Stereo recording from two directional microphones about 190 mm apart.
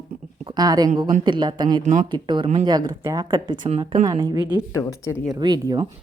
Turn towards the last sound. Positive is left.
turn(degrees=-20)  # may be behind; listen again after turning